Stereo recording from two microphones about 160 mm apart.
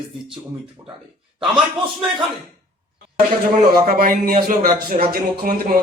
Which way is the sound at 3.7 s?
65° right (ahead or behind).